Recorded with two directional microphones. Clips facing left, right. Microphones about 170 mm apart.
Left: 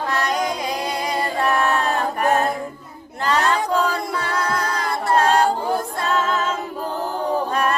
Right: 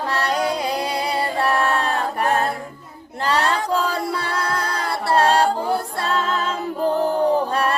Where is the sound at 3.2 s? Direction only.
30° right (ahead or behind).